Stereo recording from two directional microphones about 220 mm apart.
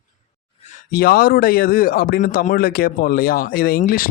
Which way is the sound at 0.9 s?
45° left (ahead or behind).